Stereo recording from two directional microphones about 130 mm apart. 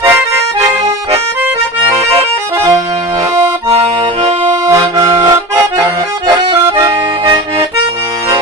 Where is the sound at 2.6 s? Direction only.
20° right (ahead or behind).